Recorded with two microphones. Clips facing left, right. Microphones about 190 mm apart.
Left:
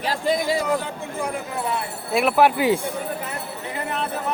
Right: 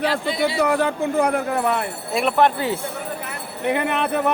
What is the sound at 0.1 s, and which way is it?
Speech, 45° left (ahead or behind).